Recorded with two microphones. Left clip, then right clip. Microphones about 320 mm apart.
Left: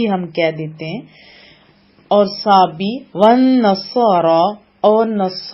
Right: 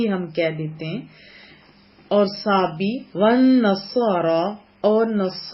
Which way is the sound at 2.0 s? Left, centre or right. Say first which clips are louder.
Left 6 dB; centre.